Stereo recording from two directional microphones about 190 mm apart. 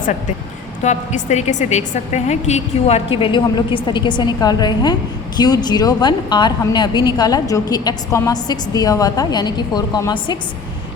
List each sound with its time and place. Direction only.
0.8 s a woman's voice: 40° left (ahead or behind); by 10.3 s 20° left (ahead or behind)